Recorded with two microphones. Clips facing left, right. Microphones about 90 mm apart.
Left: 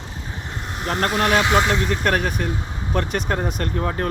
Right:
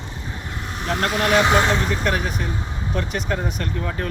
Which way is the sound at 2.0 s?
50° left (ahead or behind).